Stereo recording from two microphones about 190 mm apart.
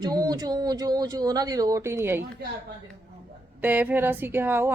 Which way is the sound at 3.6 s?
10° right (ahead or behind).